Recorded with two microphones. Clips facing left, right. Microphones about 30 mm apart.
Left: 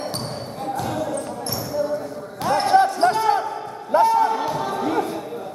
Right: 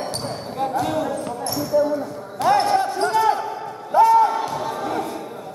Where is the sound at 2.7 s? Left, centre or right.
Left.